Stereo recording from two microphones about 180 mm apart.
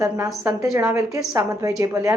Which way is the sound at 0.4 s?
15° right (ahead or behind).